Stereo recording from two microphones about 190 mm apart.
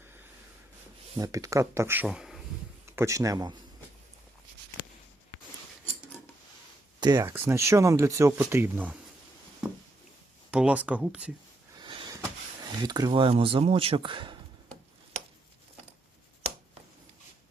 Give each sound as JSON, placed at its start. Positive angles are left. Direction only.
{"t": 1.1, "sound": "speech", "side_deg": -20}
{"t": 2.9, "sound": "speech", "side_deg": -15}
{"t": 7.0, "sound": "speech", "side_deg": -20}
{"t": 9.6, "sound": "a sound", "side_deg": -5}
{"t": 10.5, "sound": "speech", "side_deg": -5}
{"t": 11.8, "sound": "a sound", "side_deg": -25}
{"t": 12.8, "sound": "speech", "side_deg": -20}